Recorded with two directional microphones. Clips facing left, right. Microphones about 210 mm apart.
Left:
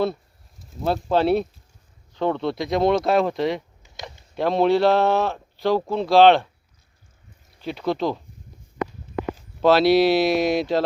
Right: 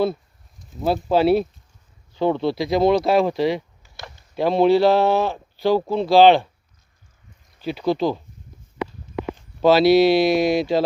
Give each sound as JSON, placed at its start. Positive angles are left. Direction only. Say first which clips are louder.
{"t": 0.6, "sound": "speech", "louder": "right 2 dB", "side_deg": 0}
{"t": 3.8, "sound": "a sound", "louder": "left 2 dB", "side_deg": 15}
{"t": 4.4, "sound": "speech", "louder": "right 3 dB", "side_deg": 0}
{"t": 7.6, "sound": "speech", "louder": "right 3 dB", "side_deg": 0}
{"t": 9.6, "sound": "speech", "louder": "right 2 dB", "side_deg": -5}